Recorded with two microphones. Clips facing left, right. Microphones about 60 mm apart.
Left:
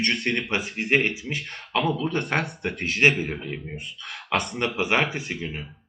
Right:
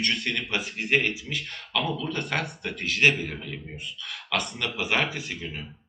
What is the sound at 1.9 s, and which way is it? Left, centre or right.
Speech, left.